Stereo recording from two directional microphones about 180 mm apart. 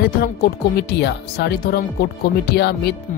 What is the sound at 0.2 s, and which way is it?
Speech, 60° left (ahead or behind).